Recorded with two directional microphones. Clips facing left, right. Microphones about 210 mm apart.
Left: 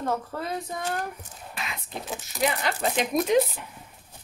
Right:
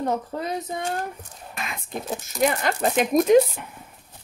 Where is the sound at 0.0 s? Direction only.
20° right (ahead or behind).